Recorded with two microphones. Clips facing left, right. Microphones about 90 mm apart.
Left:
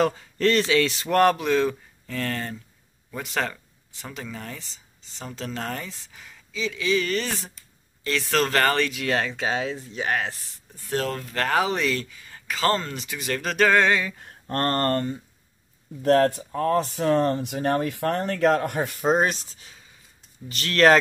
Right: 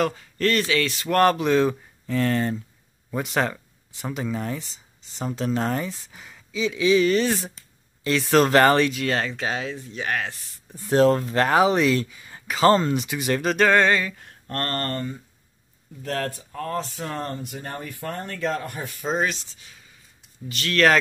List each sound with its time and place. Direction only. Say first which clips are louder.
0.0 s speech: left 2 dB; 20° left (ahead or behind)
1.0 s speech: right 3 dB; 5° left (ahead or behind); by 8.9 s 15° right (ahead or behind)
8.9 s speech: even; centre (ahead or behind)
10.9 s speech: right 9 dB; 30° right (ahead or behind)
11.3 s speech: right 5 dB; 15° right (ahead or behind); by 14.3 s 10° left (ahead or behind)
14.5 s speech: left 4 dB; 30° left (ahead or behind)
14.9 s speech: left 5 dB; 45° left (ahead or behind)
16.0 s speech: left 10 dB; 80° left; by 19.3 s 50° left (ahead or behind)
20.4 s speech: left 2 dB; 35° left (ahead or behind)